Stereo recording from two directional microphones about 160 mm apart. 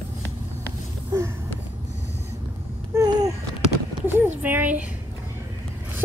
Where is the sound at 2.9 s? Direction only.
25° right (ahead or behind).